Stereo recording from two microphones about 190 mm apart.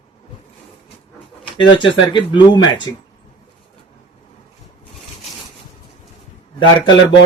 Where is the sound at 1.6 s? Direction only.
25° left (ahead or behind).